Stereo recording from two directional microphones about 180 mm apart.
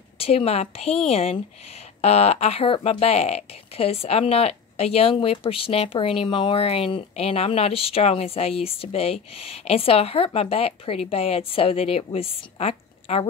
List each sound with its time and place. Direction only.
0.2 s speech: 35° left (ahead or behind)